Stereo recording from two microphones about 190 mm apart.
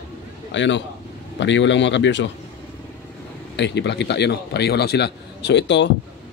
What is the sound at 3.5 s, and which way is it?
A man's voice, 65° left (ahead or behind).